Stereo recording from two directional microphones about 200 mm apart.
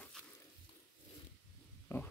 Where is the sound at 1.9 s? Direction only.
15° left (ahead or behind).